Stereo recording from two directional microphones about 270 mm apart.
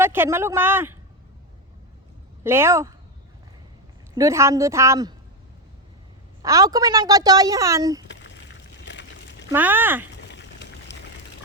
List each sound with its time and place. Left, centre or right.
0.0 s a woman's voice: centre
2.4 s a woman's voice: centre
4.1 s a woman's voice: centre
6.4 s a woman's voice: centre
8.0 s a sound: left
9.5 s a woman's voice: centre
10.3 s boiling: left